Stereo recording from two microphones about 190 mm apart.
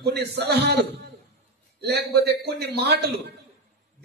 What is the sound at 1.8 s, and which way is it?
A man's voice, 60° right (ahead or behind).